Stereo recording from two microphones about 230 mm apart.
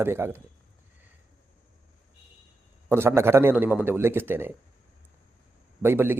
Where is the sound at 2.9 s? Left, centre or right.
Centre.